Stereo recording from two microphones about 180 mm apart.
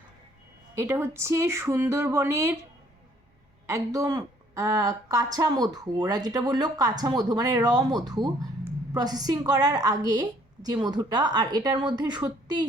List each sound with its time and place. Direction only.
0.8 s speech: 15° right (ahead or behind)
3.7 s a woman's voice: 15° right (ahead or behind)